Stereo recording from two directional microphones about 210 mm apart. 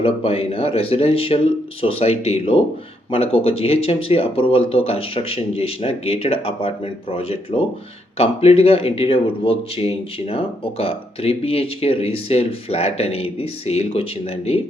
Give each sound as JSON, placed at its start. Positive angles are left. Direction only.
{"t": 0.0, "sound": "speech", "side_deg": 25}